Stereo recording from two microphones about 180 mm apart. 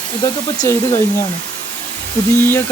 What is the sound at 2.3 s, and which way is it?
Speech, 10° left (ahead or behind).